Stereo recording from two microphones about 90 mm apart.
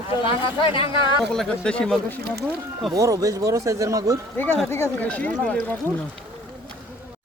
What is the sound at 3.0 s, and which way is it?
Speech, 40° right (ahead or behind).